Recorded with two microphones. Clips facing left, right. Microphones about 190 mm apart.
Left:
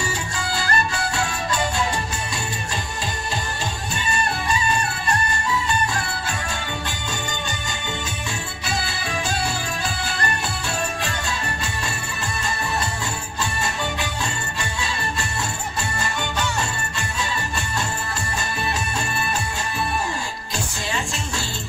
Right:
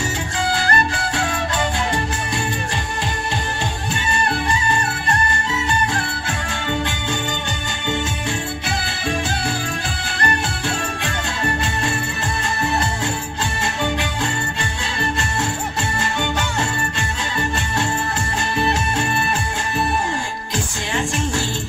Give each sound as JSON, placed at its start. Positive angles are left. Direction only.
{"t": 0.4, "sound": "music", "side_deg": -55}
{"t": 5.0, "sound": "music", "side_deg": -65}
{"t": 16.0, "sound": "music", "side_deg": -55}
{"t": 18.6, "sound": "music", "side_deg": -55}